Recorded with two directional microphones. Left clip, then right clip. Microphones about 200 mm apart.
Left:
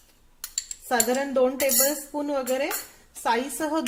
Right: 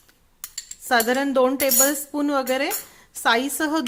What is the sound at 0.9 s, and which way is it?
Speech, 30° right (ahead or behind).